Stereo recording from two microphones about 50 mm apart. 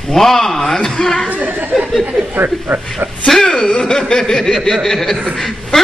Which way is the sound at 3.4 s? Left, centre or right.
Centre.